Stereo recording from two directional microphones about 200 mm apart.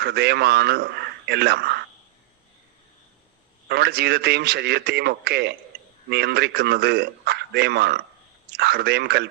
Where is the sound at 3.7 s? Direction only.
55° right (ahead or behind).